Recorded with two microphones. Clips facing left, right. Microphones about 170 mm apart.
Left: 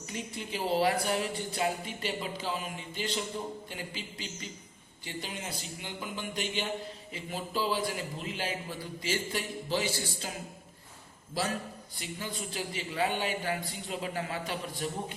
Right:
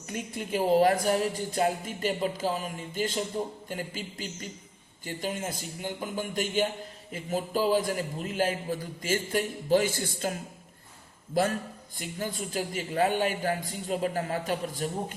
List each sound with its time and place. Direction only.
0.1 s a man's voice: 50° right (ahead or behind)
11.9 s a man's voice: 45° right (ahead or behind)